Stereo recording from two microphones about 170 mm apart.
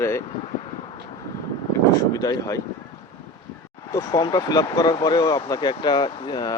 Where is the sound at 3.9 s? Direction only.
20° left (ahead or behind).